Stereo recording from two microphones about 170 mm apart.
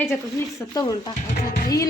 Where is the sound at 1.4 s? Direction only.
60° left (ahead or behind).